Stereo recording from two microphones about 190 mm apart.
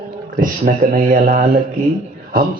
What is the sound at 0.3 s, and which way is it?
Speech, 45° right (ahead or behind).